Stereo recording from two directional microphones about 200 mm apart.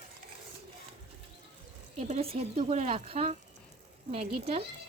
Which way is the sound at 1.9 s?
30° right (ahead or behind).